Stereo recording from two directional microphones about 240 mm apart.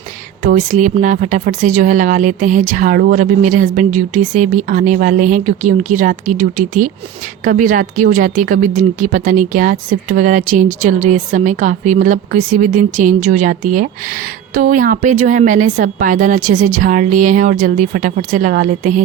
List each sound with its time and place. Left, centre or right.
0.4 s speech: right